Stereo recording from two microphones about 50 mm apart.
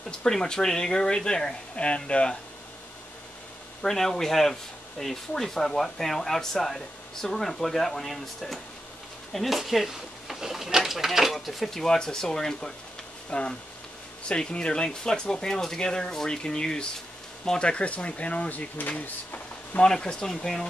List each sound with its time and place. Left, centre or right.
0.2 s speech: centre
3.8 s speech: centre
13.3 s speech: left
19.8 s speech: centre